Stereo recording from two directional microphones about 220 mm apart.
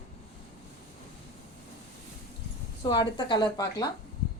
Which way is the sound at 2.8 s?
20° left (ahead or behind).